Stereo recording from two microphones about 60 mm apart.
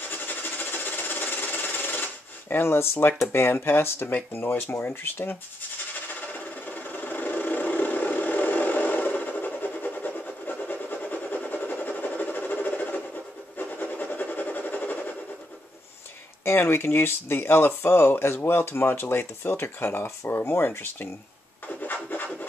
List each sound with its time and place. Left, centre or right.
0.1 s sewing machine: left
2.5 s speech: left
5.9 s a sound: left
16.4 s speech: left
21.6 s scratch: left